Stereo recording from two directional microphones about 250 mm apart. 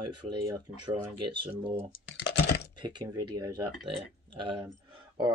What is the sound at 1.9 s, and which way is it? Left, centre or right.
Computer keyboard, left.